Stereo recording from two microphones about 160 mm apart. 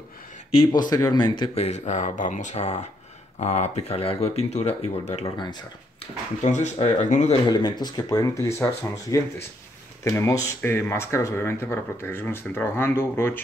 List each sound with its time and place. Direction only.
0.7 s speech: 25° left (ahead or behind)
1.5 s speech: 45° left (ahead or behind)
6.4 s speech: 45° left (ahead or behind)
7.4 s speech: 25° left (ahead or behind)